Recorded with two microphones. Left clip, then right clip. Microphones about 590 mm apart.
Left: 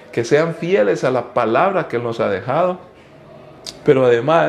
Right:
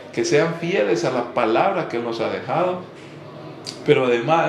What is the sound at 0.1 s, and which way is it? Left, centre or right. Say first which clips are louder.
Speech: left 3 dB; left.